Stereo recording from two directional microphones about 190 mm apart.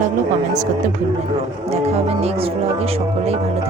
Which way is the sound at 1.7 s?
35° right (ahead or behind).